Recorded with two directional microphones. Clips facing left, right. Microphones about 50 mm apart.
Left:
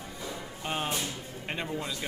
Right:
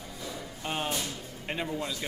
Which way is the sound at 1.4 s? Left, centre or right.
Centre.